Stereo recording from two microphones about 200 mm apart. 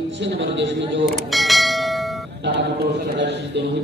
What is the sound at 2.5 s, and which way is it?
A man's voice, 60° right (ahead or behind).